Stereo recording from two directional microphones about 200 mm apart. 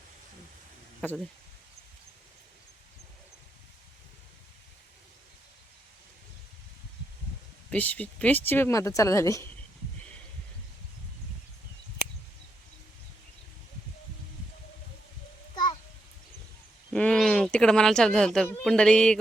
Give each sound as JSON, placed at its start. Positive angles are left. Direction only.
{"t": 1.0, "sound": "speech", "side_deg": 10}
{"t": 7.7, "sound": "speech", "side_deg": 5}
{"t": 15.5, "sound": "a sound", "side_deg": 20}
{"t": 16.9, "sound": "speech", "side_deg": 5}